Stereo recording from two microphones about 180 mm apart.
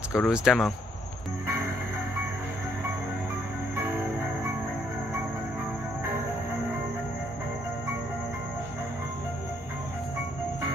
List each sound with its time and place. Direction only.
0.1 s speech: 5° right (ahead or behind)